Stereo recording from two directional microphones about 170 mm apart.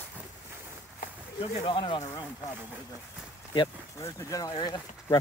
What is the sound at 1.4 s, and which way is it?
Speech, 30° left (ahead or behind).